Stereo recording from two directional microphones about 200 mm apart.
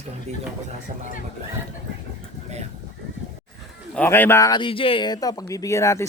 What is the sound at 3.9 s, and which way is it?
Speech, 10° left (ahead or behind).